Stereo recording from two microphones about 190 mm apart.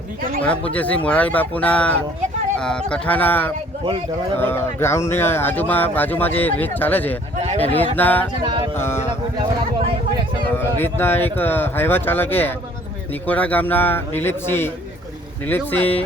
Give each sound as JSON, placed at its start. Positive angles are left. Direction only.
{"t": 0.2, "sound": "speech", "side_deg": -45}
{"t": 0.4, "sound": "speech", "side_deg": 5}
{"t": 10.6, "sound": "speech", "side_deg": 10}